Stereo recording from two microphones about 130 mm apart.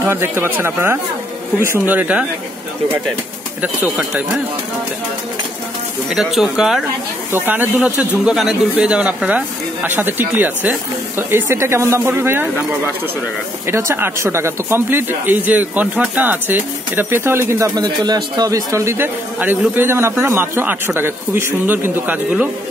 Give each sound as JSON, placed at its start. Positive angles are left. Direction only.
{"t": 0.0, "sound": "speech", "side_deg": -20}
{"t": 3.9, "sound": "speech", "side_deg": -5}
{"t": 6.0, "sound": "speech", "side_deg": -5}
{"t": 13.7, "sound": "speech", "side_deg": -20}
{"t": 17.8, "sound": "a man's voice", "side_deg": -35}